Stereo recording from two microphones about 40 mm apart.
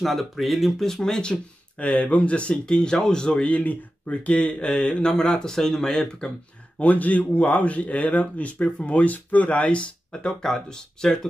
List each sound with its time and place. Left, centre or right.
0.0 s speech: centre
1.8 s speech: left; by 3.4 s centre
3.4 s speech: left
5.0 s speech: centre
6.8 s speech: left
8.6 s speech: left
8.9 s speech: left
10.4 s speech: centre